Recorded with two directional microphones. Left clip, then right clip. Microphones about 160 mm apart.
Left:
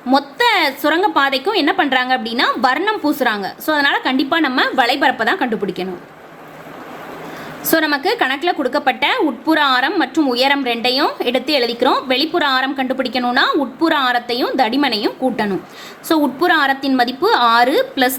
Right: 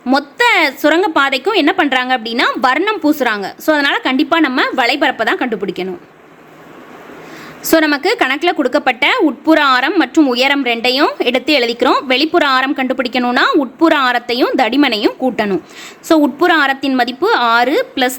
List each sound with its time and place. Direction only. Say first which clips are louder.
0.1 s a woman's voice: right 2 dB; 40° right (ahead or behind)
7.6 s a woman's voice: right 4 dB; 45° right (ahead or behind)